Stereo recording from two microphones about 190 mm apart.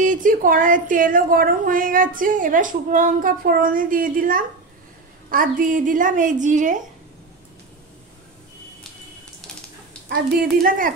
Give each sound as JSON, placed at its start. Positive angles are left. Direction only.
{"t": 0.0, "sound": "a woman's voice", "side_deg": -45}
{"t": 10.0, "sound": "a woman's voice", "side_deg": -50}